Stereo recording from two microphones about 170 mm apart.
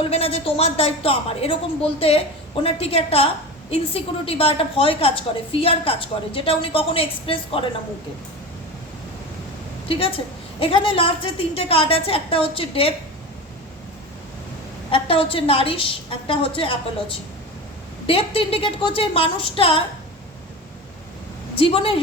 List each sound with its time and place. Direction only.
0.0 s a woman's voice: 35° left (ahead or behind)
10.6 s a woman's voice: 30° left (ahead or behind)
14.8 s a woman's voice: 30° left (ahead or behind)
21.6 s a woman's voice: 35° left (ahead or behind)